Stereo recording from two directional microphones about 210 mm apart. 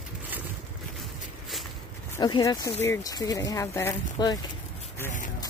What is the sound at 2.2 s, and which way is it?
Speech, 20° left (ahead or behind).